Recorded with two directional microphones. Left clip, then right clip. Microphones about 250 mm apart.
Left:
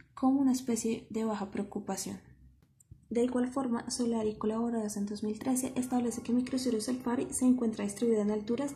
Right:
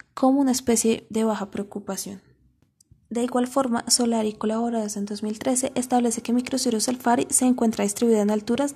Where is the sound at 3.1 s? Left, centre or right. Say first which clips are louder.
Right 8 dB; right.